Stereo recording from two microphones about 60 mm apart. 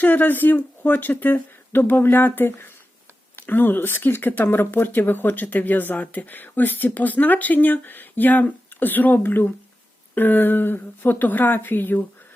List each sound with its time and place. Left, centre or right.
0.0 s speech: left